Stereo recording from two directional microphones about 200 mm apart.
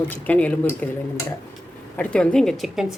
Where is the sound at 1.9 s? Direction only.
5° left (ahead or behind).